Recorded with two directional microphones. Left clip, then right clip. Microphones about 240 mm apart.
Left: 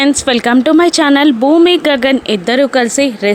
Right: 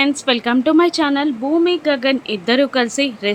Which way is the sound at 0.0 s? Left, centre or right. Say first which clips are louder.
Left 5 dB; left.